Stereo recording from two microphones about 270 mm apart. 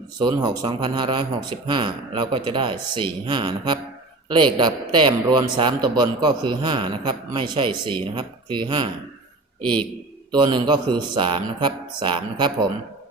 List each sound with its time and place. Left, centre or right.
0.2 s a man's voice: centre
9.6 s a man's voice: centre
10.3 s a man's voice: centre